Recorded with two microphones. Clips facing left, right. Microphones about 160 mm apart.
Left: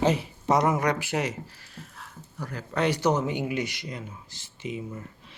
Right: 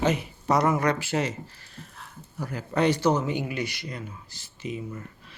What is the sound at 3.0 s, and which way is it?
Speech, 20° left (ahead or behind).